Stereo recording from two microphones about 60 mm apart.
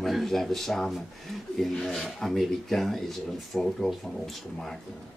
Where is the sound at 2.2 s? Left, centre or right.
Centre.